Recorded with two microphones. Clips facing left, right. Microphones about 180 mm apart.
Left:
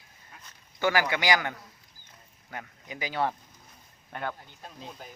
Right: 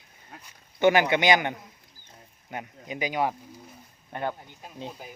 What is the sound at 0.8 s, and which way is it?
A man's voice, 20° right (ahead or behind).